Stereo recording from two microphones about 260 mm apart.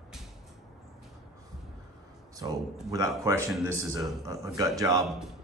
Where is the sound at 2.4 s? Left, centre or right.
Centre.